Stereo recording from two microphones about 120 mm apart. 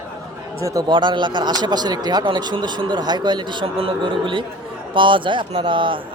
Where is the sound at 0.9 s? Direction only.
40° right (ahead or behind).